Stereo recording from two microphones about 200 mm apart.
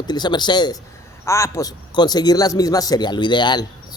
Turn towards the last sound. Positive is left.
turn(degrees=20)  # may be behind; listen again after turning